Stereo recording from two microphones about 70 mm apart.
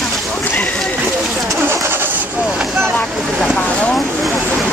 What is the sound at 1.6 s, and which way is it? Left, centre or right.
Vehicle, right.